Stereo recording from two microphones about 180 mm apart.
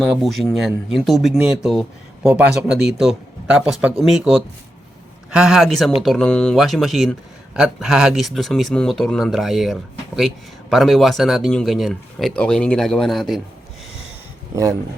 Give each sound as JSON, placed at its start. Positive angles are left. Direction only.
{"t": 0.0, "sound": "speech", "side_deg": 0}
{"t": 14.5, "sound": "speech", "side_deg": -15}